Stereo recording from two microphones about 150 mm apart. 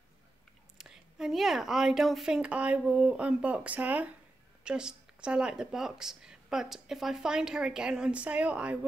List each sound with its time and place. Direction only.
0.7 s a woman's voice: 5° right (ahead or behind)